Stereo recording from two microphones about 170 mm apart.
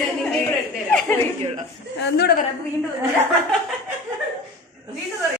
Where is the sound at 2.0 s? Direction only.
75° left (ahead or behind).